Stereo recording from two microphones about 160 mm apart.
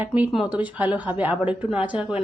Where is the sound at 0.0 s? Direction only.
10° right (ahead or behind).